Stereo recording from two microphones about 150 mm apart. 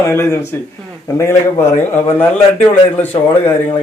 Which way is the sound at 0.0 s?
15° left (ahead or behind).